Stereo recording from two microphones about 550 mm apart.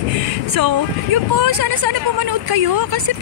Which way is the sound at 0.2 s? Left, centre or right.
Right.